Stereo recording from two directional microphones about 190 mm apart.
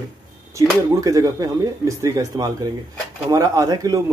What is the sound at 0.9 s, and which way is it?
Speech, 20° right (ahead or behind).